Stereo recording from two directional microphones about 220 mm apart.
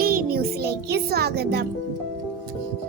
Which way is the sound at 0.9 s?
45° right (ahead or behind).